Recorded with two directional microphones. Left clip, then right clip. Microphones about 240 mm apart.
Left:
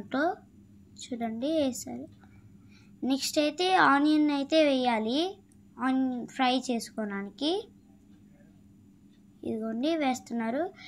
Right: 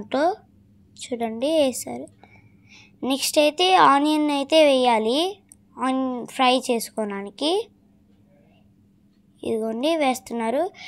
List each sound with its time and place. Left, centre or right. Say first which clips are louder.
0.1 s a woman's voice: right 8 dB; right
9.4 s a woman's voice: right 8 dB; right